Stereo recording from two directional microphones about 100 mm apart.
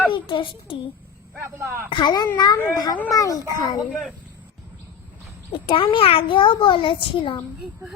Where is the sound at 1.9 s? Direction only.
50° left (ahead or behind).